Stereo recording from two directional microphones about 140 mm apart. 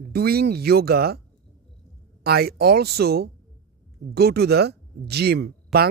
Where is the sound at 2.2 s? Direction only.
90° right.